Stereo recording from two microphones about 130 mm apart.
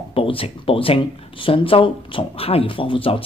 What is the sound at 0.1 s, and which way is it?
Speech, 45° left (ahead or behind).